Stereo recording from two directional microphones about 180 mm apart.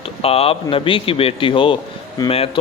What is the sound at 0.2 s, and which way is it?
A man's voice, 35° left (ahead or behind).